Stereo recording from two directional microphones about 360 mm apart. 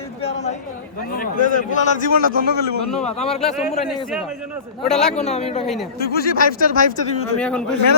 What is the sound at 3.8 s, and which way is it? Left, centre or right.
A man's voice, centre.